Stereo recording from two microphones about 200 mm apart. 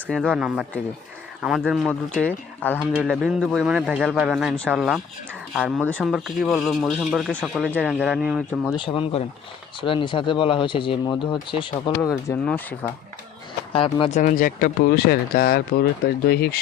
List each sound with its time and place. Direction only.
0.1 s speech: 5° right (ahead or behind)
2.9 s speech: 5° right (ahead or behind)
8.7 s speech: 25° left (ahead or behind)
12.3 s speech: 10° left (ahead or behind)
13.7 s speech: 25° left (ahead or behind)
14.2 s speech: 40° left (ahead or behind)